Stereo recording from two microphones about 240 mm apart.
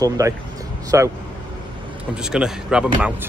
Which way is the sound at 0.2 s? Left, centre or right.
Centre.